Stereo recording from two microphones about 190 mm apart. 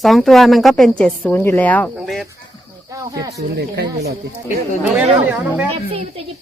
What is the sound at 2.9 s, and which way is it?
Speech, 15° right (ahead or behind).